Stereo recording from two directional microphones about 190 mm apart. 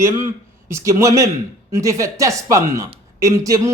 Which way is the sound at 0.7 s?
15° right (ahead or behind).